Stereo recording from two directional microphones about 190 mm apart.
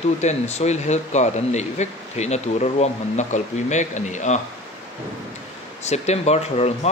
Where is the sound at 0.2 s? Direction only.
35° left (ahead or behind).